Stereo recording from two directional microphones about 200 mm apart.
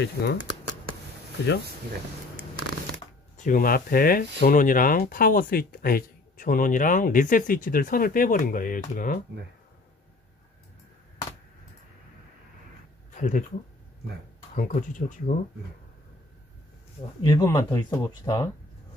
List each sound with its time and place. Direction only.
0.0 s speech: 55° left (ahead or behind)
3.3 s speech: 45° left (ahead or behind)
13.1 s a sound: 40° left (ahead or behind)
14.5 s speech: 40° left (ahead or behind)
17.2 s speech: 20° left (ahead or behind)